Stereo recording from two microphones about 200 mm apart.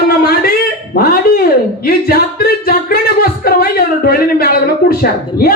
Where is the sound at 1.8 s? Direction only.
50° left (ahead or behind).